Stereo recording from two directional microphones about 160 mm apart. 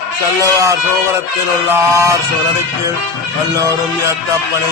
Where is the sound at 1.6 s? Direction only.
15° right (ahead or behind).